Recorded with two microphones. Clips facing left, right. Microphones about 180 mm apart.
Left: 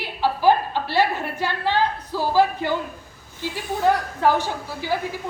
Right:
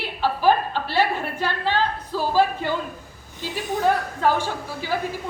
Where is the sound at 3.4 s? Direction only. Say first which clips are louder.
Even; 20° right (ahead or behind).